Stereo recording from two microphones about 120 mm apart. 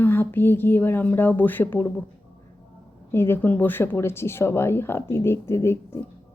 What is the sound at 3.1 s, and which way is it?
Speech, 20° left (ahead or behind).